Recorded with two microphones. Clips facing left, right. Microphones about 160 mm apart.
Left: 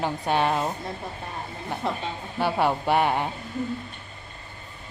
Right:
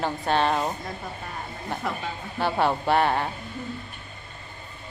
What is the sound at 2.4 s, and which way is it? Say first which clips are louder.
Speech: even; 10° left (ahead or behind).